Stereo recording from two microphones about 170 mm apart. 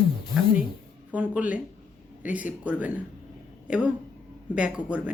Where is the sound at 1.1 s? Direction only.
10° right (ahead or behind).